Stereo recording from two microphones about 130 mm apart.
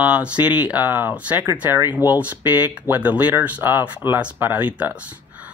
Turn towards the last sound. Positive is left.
turn(degrees=-10)  # may be behind; listen again after turning